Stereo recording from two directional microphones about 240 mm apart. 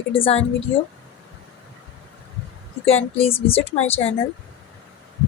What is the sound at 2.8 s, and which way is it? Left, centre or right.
A woman's voice, left.